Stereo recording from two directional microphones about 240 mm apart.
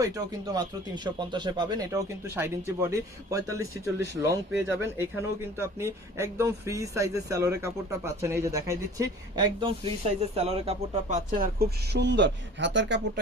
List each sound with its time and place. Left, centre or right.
0.0 s a man's voice: centre; by 13.0 s right